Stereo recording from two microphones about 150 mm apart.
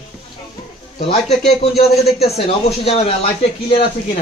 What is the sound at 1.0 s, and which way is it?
Speech, 45° left (ahead or behind).